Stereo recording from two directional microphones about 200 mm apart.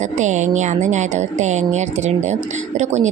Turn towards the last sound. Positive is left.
turn(degrees=-35)  # may be behind; listen again after turning